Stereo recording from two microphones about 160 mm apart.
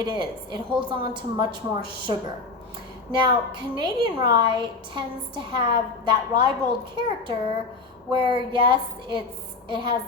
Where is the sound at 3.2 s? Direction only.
30° right (ahead or behind).